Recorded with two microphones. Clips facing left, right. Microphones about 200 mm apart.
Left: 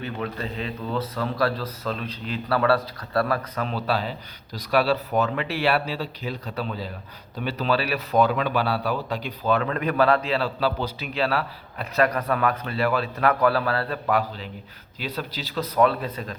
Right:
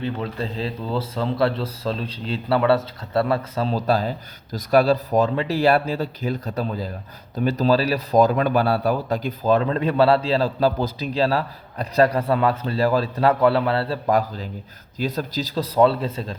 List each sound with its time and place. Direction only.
0.0 s speech: 30° right (ahead or behind)
3.8 s speech: 40° right (ahead or behind)
9.6 s a man's voice: 30° right (ahead or behind)
14.1 s a man's voice: 40° right (ahead or behind)